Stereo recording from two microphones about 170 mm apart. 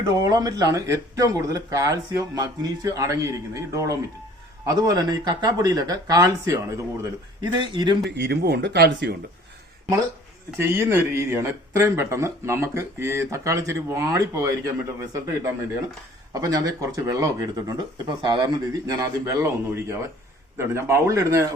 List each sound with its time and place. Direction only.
0.1 s speech: 20° right (ahead or behind)
8.1 s speech: 80° right
10.6 s speech: 15° right (ahead or behind)